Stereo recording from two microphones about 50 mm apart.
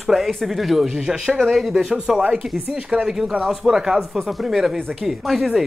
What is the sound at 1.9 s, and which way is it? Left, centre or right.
Speech, centre.